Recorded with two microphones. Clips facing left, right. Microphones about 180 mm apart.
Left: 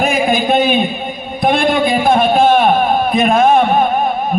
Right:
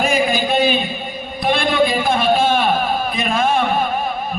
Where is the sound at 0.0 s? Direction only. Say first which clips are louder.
Left 3 dB; 55° left (ahead or behind).